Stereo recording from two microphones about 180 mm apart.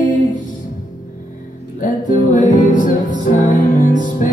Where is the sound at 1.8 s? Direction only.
45° left (ahead or behind).